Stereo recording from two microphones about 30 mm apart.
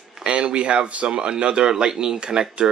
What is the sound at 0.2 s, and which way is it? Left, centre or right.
Speech, right.